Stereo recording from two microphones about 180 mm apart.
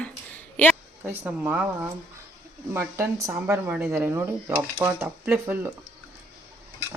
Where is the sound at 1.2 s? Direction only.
10° right (ahead or behind).